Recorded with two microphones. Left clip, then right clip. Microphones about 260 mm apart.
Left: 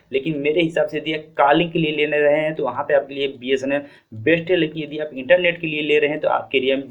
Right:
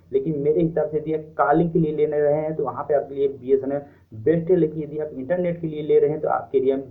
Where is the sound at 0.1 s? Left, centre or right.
Left.